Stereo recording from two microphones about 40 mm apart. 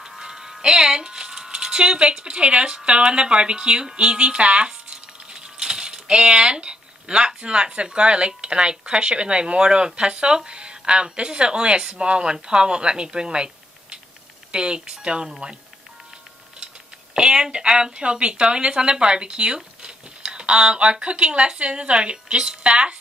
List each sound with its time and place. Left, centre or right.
0.0 s a woman's voice: centre
17.1 s a woman's voice: centre